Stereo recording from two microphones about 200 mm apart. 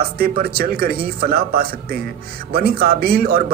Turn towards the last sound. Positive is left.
turn(degrees=-50)  # may be behind; listen again after turning